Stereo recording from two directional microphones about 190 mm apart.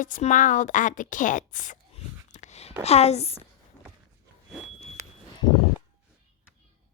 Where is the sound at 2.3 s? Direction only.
35° left (ahead or behind).